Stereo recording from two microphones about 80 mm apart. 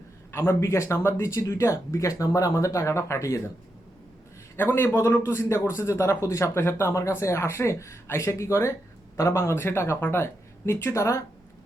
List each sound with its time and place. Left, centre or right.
0.3 s a man's voice: left
4.5 s a man's voice: left